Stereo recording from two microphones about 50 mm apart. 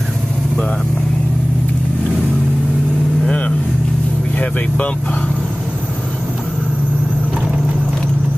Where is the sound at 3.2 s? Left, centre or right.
Left.